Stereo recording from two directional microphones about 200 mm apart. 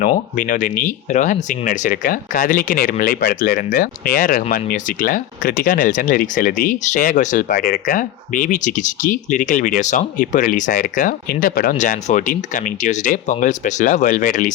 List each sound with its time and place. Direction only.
0.0 s speech: 40° left (ahead or behind)